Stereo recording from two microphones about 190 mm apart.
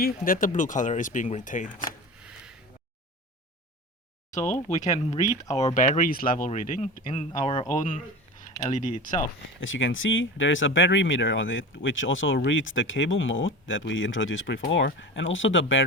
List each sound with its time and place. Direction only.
0.0 s speech: 45° left (ahead or behind)
4.3 s speech: 40° left (ahead or behind)
8.6 s speech: 40° left (ahead or behind)
9.6 s speech: 90° left